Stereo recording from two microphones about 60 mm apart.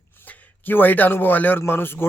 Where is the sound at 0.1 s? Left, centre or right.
Left.